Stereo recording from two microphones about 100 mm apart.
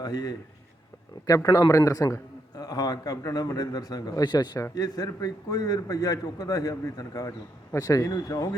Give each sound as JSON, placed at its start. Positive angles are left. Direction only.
{"t": 0.0, "sound": "a man's voice", "side_deg": 40}